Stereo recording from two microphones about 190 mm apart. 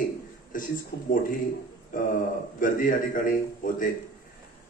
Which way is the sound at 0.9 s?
60° left (ahead or behind).